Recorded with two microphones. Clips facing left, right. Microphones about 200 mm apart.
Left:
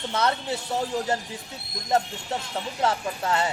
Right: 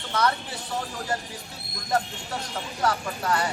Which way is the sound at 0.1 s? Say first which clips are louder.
Right 1 dB; 25° left (ahead or behind).